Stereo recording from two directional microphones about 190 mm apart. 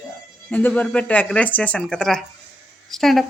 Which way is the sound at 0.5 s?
10° left (ahead or behind).